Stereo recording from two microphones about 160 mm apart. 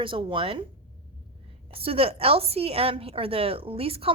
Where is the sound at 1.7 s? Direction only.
35° right (ahead or behind).